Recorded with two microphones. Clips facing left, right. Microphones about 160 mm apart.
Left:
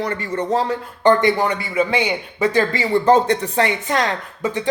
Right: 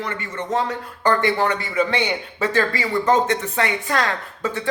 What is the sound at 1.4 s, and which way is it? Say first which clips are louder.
Speech: left 1 dB; 10° left (ahead or behind).